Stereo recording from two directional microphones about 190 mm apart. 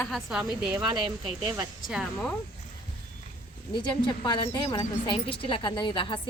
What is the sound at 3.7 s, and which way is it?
A woman's voice, 25° left (ahead or behind).